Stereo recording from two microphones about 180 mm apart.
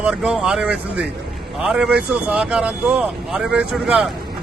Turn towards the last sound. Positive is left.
turn(degrees=-5)  # may be behind; listen again after turning